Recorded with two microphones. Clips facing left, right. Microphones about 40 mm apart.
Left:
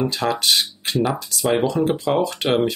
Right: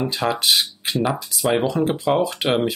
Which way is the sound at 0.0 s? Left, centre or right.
Centre.